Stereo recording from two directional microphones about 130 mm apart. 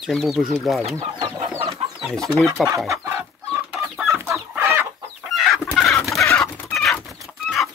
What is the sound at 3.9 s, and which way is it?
Chicken, centre (ahead or behind).